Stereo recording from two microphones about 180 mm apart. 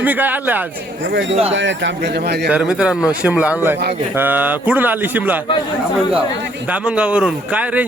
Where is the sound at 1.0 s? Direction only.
80° right.